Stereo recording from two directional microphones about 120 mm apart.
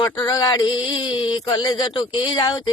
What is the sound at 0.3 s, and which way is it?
Speech, 30° left (ahead or behind).